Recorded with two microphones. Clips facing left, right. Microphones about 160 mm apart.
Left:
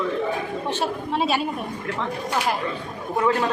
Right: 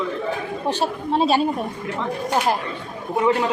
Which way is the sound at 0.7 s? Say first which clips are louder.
Right 4 dB; 30° right (ahead or behind).